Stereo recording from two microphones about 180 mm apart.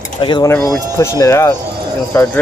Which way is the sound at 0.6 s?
20° right (ahead or behind).